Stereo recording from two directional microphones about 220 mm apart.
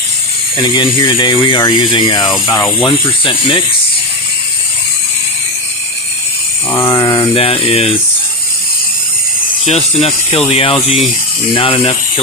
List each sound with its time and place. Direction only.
0.5 s speech: 20° left (ahead or behind)
6.7 s speech: 10° left (ahead or behind)
9.6 s speech: 25° left (ahead or behind)